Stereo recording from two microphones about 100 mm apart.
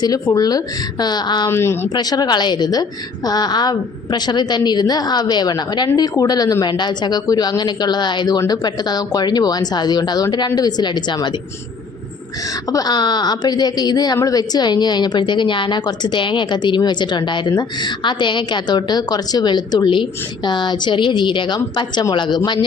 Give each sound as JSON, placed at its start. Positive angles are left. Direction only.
{"t": 0.0, "sound": "a woman's voice", "side_deg": 40}
{"t": 1.5, "sound": "speech", "side_deg": 25}
{"t": 1.9, "sound": "a woman's voice", "side_deg": 45}
{"t": 12.7, "sound": "a woman's voice", "side_deg": 40}